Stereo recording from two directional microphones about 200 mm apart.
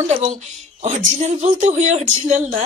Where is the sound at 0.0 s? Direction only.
30° right (ahead or behind).